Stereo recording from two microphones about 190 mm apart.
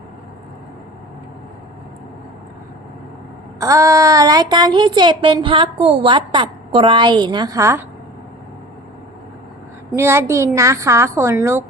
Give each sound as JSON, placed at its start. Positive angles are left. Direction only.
{"t": 3.6, "sound": "speech", "side_deg": -15}
{"t": 9.9, "sound": "a woman's voice", "side_deg": -15}